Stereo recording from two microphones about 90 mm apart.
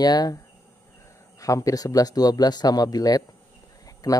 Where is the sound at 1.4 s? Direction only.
35° left (ahead or behind).